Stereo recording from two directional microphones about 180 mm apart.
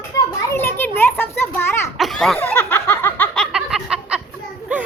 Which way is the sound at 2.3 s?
10° left (ahead or behind).